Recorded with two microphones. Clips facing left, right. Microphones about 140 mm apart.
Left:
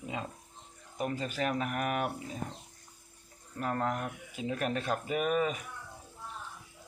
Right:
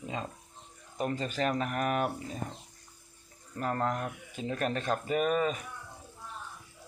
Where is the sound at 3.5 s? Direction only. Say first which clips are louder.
Right 1 dB; centre (ahead or behind).